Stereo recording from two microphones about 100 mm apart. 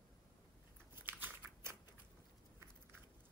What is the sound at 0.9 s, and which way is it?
Shuffling cards, 20° right (ahead or behind).